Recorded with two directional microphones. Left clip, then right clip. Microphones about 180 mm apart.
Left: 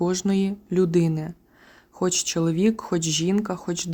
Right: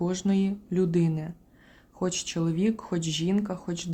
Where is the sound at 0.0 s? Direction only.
30° left (ahead or behind).